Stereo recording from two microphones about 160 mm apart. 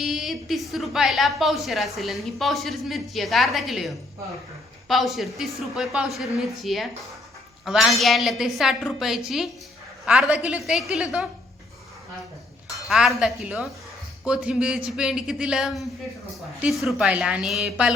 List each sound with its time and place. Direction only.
0.0 s a woman's voice: centre (ahead or behind)
12.7 s a woman's voice: centre (ahead or behind)